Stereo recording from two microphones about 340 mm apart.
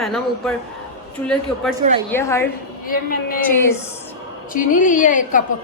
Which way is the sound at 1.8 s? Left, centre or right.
Right.